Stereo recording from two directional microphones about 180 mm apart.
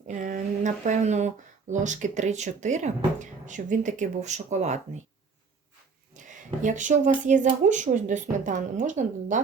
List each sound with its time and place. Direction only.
0.1 s speech: 45° right (ahead or behind)
6.1 s speech: 45° right (ahead or behind)